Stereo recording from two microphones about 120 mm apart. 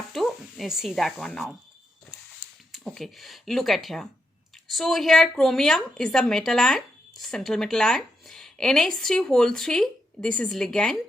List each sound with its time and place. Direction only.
0.1 s speech: centre (ahead or behind)
2.7 s a woman's voice: centre (ahead or behind)